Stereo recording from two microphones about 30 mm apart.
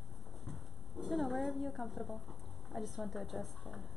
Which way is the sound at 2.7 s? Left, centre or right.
Centre.